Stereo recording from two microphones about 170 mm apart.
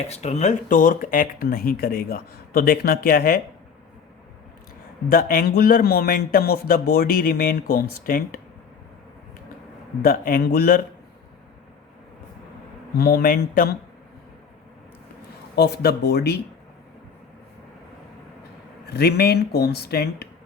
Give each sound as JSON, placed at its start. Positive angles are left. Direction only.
{"t": 0.1, "sound": "speech", "side_deg": 40}
{"t": 5.0, "sound": "speech", "side_deg": 60}
{"t": 10.0, "sound": "speech", "side_deg": 60}
{"t": 13.0, "sound": "speech", "side_deg": 60}
{"t": 15.5, "sound": "speech", "side_deg": 70}
{"t": 18.9, "sound": "speech", "side_deg": 70}